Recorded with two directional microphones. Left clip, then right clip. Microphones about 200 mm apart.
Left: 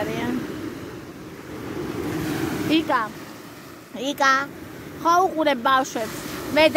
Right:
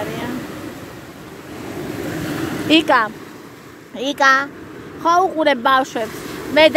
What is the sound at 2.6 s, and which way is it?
Speech, 20° right (ahead or behind).